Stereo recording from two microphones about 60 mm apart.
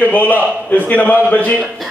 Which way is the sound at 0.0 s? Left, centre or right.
Left.